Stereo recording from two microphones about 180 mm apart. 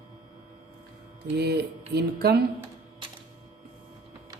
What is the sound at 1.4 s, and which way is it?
A woman's voice, 65° right (ahead or behind).